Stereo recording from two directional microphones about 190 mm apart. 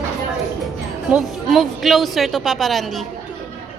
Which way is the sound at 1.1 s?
Centre (ahead or behind).